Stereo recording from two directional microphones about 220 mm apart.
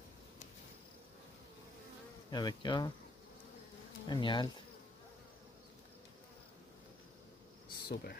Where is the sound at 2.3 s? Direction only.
20° left (ahead or behind).